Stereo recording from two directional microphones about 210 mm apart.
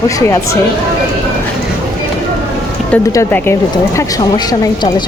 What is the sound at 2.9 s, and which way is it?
Speech, 10° left (ahead or behind).